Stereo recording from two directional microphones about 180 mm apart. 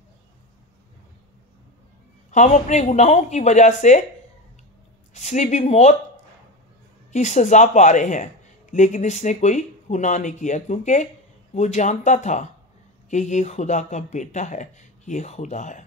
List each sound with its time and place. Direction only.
2.3 s speech: 40° left (ahead or behind)
5.1 s speech: 40° left (ahead or behind)
7.1 s speech: 40° left (ahead or behind)